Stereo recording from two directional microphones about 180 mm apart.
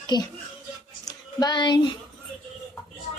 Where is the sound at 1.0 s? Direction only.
20° left (ahead or behind).